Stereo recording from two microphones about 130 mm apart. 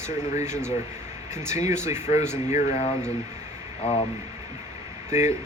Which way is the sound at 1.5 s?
65° left (ahead or behind).